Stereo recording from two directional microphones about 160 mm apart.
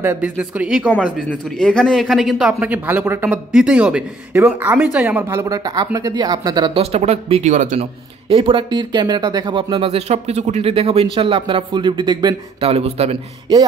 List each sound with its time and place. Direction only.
0.0 s speech: 10° right (ahead or behind)
6.8 s speech: 40° right (ahead or behind)
12.6 s speech: 40° right (ahead or behind)